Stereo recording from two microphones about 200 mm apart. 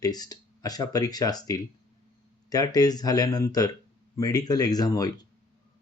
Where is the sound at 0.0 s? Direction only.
20° left (ahead or behind).